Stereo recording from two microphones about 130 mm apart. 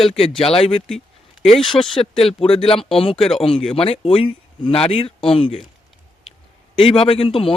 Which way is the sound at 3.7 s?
45° left (ahead or behind).